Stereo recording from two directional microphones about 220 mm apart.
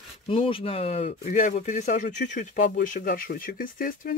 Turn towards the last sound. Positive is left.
turn(degrees=40)  # may be behind; listen again after turning